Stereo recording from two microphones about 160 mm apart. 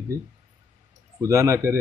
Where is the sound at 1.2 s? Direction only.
20° right (ahead or behind).